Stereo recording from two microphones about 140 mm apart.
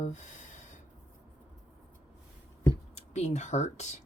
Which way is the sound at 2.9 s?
55° left (ahead or behind).